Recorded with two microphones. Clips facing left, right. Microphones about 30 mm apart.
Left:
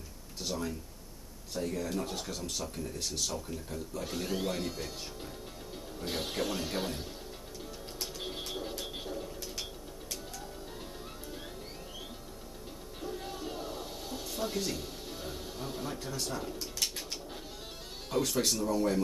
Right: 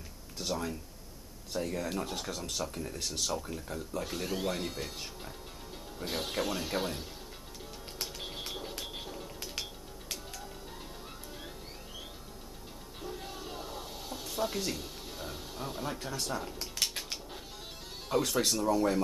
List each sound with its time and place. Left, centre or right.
0.4 s speech: centre
4.0 s speech: centre
8.0 s music: centre
8.5 s a sound: centre
9.4 s music: right
13.0 s a sound: centre
16.5 s bird: right
18.1 s speech: centre